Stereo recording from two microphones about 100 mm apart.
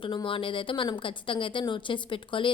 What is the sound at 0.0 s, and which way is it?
A woman's voice, 55° left (ahead or behind).